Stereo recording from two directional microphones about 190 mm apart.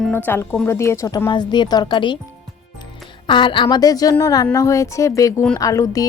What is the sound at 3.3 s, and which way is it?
Speech, 25° left (ahead or behind).